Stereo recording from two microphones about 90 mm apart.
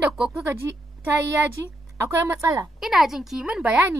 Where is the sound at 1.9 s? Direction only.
25° right (ahead or behind).